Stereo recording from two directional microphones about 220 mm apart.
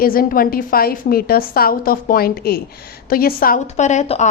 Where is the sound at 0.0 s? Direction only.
40° left (ahead or behind).